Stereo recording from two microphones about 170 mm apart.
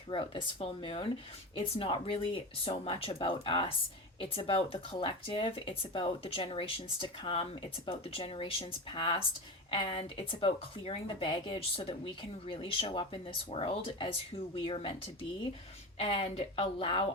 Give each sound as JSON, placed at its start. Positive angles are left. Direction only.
{"t": 0.1, "sound": "speech", "side_deg": 30}
{"t": 16.0, "sound": "speech", "side_deg": 35}